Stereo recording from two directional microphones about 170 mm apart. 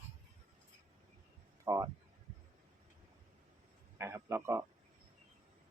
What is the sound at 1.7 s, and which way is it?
Speech, 25° right (ahead or behind).